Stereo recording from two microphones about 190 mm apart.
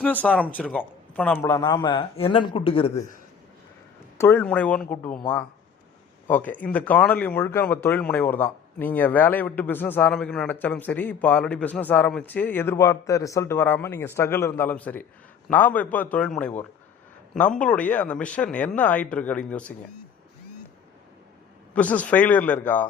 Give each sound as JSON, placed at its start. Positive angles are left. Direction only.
{"t": 0.0, "sound": "a man's voice", "side_deg": 5}
{"t": 1.5, "sound": "speech", "side_deg": 20}
{"t": 4.2, "sound": "speech", "side_deg": 10}
{"t": 21.7, "sound": "speech", "side_deg": 10}